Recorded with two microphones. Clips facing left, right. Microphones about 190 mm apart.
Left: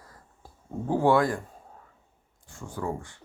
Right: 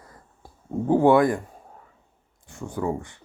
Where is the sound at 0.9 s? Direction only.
20° right (ahead or behind).